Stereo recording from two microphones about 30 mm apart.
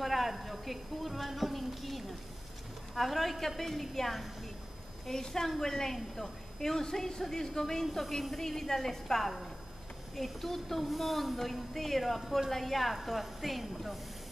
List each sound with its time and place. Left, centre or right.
0.0 s a woman's voice: centre
5.0 s a woman's voice: centre